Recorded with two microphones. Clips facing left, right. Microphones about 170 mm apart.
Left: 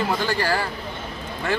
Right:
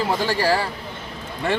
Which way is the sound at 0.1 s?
30° right (ahead or behind).